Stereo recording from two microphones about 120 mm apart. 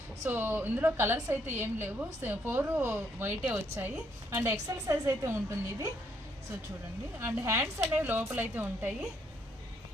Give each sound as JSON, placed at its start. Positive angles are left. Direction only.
{"t": 0.3, "sound": "a woman's voice", "side_deg": -15}
{"t": 4.7, "sound": "a woman's voice", "side_deg": -25}
{"t": 7.2, "sound": "a woman's voice", "side_deg": -20}